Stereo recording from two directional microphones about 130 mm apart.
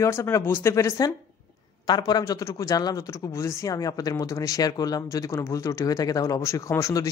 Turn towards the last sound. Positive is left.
turn(degrees=25)  # may be behind; listen again after turning